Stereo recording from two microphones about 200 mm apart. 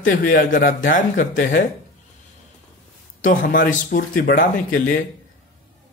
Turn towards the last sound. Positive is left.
turn(degrees=45)  # may be behind; listen again after turning